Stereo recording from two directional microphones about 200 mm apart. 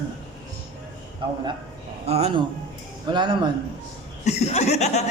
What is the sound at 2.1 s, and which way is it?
Speech, 30° right (ahead or behind).